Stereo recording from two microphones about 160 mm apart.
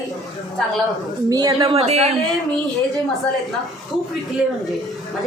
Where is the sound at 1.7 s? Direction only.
40° right (ahead or behind).